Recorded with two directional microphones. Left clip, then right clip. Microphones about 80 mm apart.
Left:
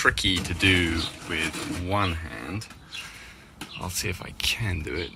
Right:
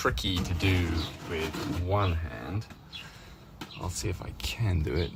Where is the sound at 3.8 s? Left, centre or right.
Centre.